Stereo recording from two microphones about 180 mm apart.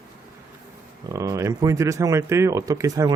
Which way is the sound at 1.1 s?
15° right (ahead or behind).